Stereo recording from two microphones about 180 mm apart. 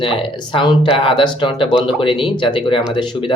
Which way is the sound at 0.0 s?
25° left (ahead or behind).